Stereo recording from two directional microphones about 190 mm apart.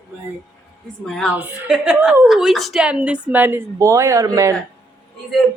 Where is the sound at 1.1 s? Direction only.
5° left (ahead or behind).